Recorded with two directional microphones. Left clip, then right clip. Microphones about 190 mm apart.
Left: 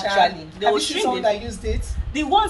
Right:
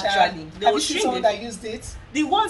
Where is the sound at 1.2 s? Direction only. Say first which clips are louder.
Even; 15° right (ahead or behind).